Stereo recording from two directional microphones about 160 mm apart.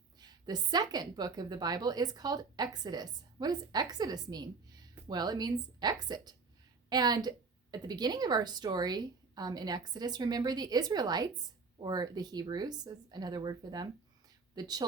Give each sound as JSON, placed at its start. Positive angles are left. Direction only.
{"t": 0.2, "sound": "a woman's voice", "side_deg": -25}